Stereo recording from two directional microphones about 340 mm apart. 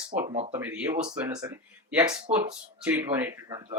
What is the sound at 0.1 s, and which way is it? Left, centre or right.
Speech, centre.